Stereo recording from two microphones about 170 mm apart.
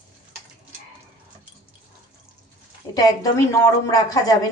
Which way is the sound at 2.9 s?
25° left (ahead or behind).